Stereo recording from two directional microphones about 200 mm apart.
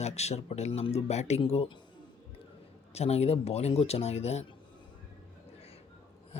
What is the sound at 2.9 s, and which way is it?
Speech, 30° left (ahead or behind).